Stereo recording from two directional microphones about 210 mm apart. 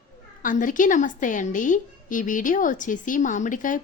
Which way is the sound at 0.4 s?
40° left (ahead or behind).